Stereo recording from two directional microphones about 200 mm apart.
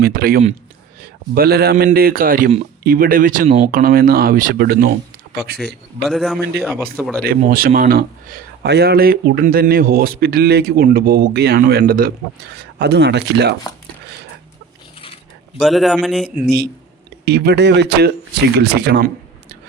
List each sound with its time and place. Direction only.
0.0 s a man's voice: 45° right (ahead or behind)
6.0 s a man's voice: centre (ahead or behind)
7.3 s a man's voice: 45° right (ahead or behind)
15.5 s a man's voice: centre (ahead or behind)
17.2 s speech: 55° right (ahead or behind)